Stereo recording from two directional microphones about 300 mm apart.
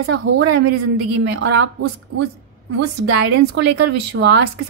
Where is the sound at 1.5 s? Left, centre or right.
Right.